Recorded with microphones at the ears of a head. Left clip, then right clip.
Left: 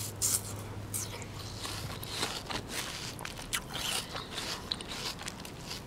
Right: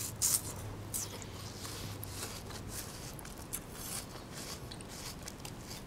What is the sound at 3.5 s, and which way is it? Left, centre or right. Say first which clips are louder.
Biting: left 14 dB; left.